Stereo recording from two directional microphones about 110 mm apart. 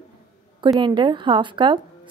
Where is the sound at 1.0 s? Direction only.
45° right (ahead or behind).